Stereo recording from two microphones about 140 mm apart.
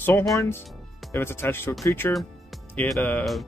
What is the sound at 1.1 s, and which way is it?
Speech, 15° left (ahead or behind).